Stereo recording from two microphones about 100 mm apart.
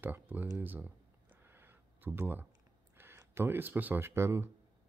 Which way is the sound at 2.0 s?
20° right (ahead or behind).